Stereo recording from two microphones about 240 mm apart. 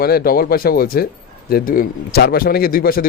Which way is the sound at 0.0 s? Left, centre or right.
Left.